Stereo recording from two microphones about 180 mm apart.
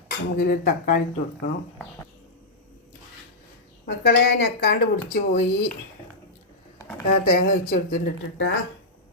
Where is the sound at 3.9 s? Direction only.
65° left (ahead or behind).